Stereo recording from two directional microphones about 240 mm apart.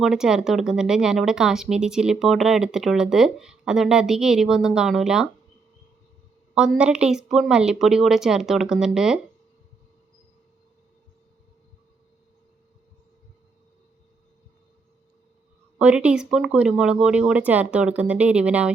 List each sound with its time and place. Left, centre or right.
0.0 s speech: centre
6.5 s speech: centre
15.8 s speech: centre